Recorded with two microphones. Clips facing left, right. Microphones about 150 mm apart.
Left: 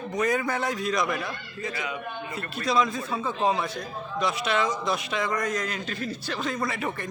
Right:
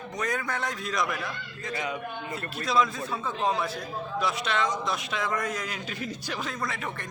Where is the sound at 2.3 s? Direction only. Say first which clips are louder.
Left 1 dB; centre (ahead or behind).